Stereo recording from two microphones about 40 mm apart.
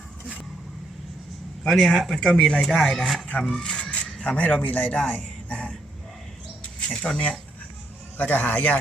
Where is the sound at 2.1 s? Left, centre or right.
Centre.